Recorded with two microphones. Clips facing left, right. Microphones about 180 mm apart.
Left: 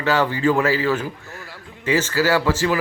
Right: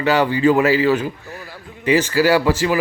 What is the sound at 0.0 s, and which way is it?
A man's voice, 15° right (ahead or behind).